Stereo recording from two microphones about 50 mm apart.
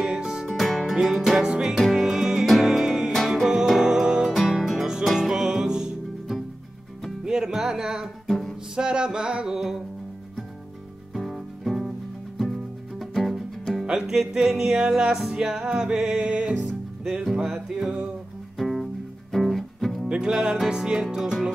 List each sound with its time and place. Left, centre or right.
0.0 s music: centre
0.5 s music: centre
1.8 s music: centre
4.3 s music: centre
7.2 s music: centre
8.3 s music: centre
8.7 s music: centre
11.1 s music: centre
13.0 s music: centre; by 16.6 s right
17.2 s music: centre
18.6 s music: centre
20.1 s music: centre